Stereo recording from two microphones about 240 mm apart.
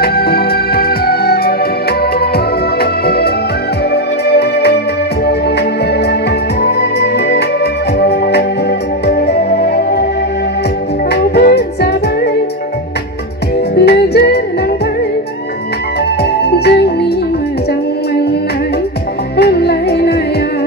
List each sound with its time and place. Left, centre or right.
0.0 s music: left
6.6 s music: left
11.1 s music: left
13.7 s music: left
16.2 s music: left
19.3 s music: left